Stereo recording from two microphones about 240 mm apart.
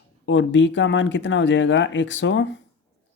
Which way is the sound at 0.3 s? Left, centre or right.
Left.